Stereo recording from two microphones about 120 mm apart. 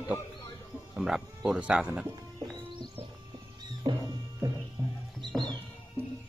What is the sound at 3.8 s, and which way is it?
Music, 35° right (ahead or behind).